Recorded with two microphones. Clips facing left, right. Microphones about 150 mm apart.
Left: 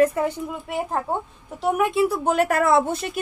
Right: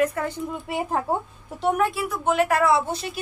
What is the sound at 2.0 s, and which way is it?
A woman's voice, 40° left (ahead or behind).